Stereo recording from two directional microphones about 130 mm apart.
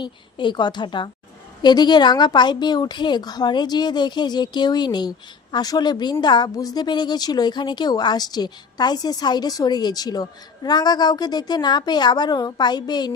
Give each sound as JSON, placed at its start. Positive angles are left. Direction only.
{"t": 0.0, "sound": "a woman's voice", "side_deg": 35}